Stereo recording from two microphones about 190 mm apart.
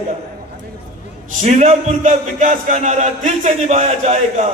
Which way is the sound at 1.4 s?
35° right (ahead or behind).